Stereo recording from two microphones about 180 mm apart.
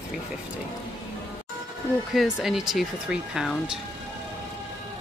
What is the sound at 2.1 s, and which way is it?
Speech, centre (ahead or behind).